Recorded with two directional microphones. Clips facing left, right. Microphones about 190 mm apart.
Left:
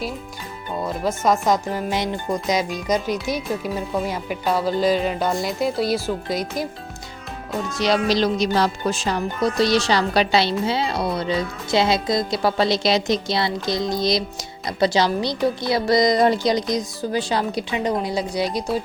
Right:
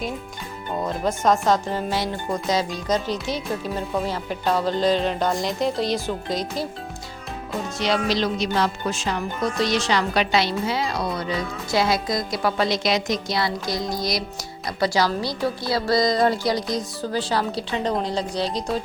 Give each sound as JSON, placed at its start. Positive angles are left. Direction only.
{"t": 0.9, "sound": "speech", "side_deg": 5}
{"t": 7.8, "sound": "a woman's voice", "side_deg": 40}